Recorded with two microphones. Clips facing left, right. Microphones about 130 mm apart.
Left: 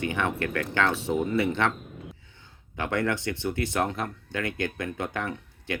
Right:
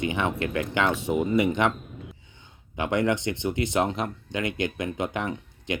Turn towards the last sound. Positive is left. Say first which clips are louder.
# right 2 dB
turn(degrees=-15)  # may be behind; listen again after turning